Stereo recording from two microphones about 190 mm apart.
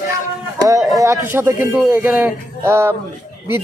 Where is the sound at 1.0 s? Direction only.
15° right (ahead or behind).